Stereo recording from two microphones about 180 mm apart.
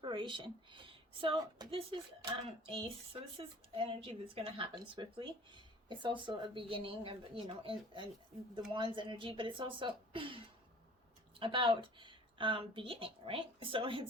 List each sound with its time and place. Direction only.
0.0 s a woman's voice: 25° right (ahead or behind)